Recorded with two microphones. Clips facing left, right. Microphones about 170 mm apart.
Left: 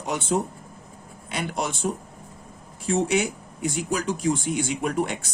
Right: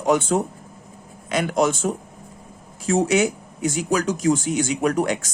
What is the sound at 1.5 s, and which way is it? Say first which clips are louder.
Speech: right 7 dB; 90° right.